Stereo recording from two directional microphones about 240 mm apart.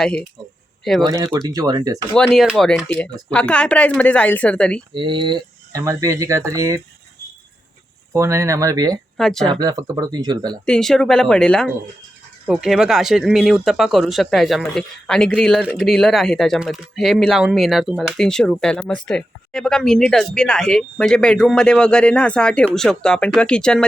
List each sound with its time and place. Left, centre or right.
0.0 s speech: centre
1.0 s speech: centre
2.1 s speech: centre
4.9 s speech: centre
8.1 s speech: centre
9.1 s speech: centre
9.5 s speech: centre
10.7 s speech: centre